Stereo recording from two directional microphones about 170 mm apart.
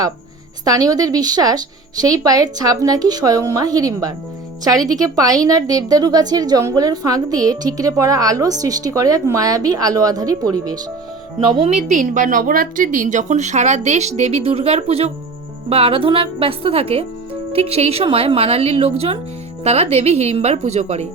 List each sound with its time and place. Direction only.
0.6 s a woman's voice: 20° right (ahead or behind)
11.5 s a woman's voice: 35° right (ahead or behind)